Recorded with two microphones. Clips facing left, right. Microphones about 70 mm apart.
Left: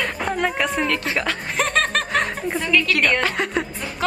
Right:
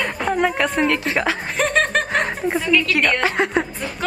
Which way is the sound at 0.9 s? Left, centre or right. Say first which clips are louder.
Right 2 dB; centre.